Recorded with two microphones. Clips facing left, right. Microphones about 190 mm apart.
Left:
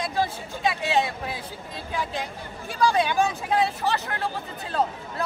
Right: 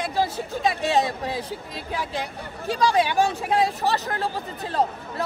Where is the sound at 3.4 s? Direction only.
35° right (ahead or behind).